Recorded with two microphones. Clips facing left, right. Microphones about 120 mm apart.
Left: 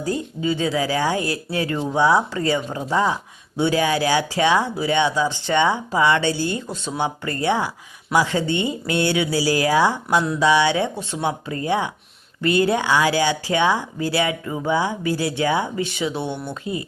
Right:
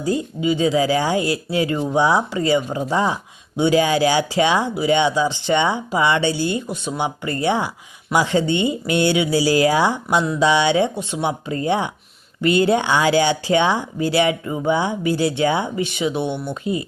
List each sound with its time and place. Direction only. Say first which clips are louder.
0.0 s speech: right 3 dB; 15° right (ahead or behind)